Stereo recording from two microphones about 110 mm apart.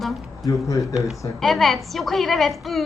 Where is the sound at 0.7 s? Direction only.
30° left (ahead or behind).